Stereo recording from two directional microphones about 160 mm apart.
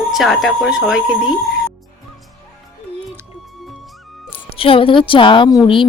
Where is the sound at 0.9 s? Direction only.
5° right (ahead or behind).